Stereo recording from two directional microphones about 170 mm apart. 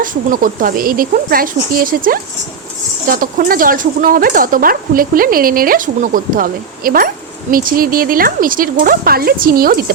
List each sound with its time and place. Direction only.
0.0 s speech: 55° right (ahead or behind)